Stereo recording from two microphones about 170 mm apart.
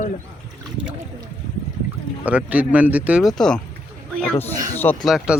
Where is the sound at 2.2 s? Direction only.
10° right (ahead or behind); by 5.0 s 10° left (ahead or behind).